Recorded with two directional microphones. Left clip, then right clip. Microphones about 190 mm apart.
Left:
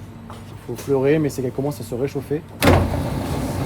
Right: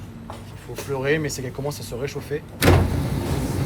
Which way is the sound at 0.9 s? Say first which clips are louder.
Left 5 dB; 45° left (ahead or behind).